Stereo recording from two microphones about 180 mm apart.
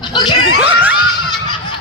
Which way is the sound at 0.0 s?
25° left (ahead or behind).